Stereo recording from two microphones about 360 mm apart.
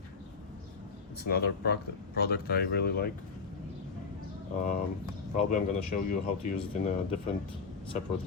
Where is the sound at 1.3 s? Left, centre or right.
Left.